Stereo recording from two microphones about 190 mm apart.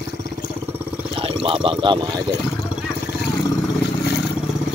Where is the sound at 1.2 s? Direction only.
25° right (ahead or behind).